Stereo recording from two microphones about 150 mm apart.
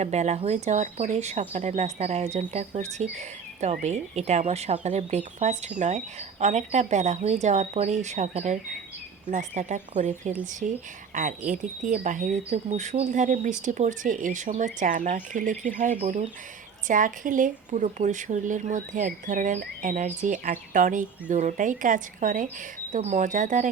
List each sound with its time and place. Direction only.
0.0 s speech: 50° right (ahead or behind)
16.0 s speech: 45° right (ahead or behind)
16.9 s speech: 60° right (ahead or behind)
22.9 s speech: 50° right (ahead or behind)